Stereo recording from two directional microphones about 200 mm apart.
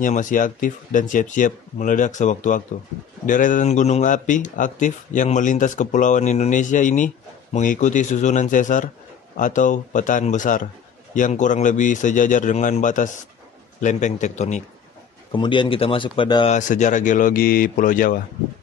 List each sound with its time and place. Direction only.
0.0 s speech: 40° left (ahead or behind)
15.3 s speech: 25° left (ahead or behind)
16.5 s speech: 35° left (ahead or behind)